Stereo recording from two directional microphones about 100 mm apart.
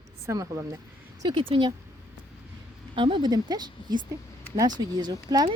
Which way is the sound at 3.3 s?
45° right (ahead or behind).